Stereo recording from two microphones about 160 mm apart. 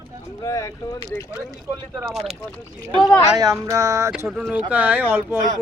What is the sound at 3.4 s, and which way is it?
Speech, 20° right (ahead or behind).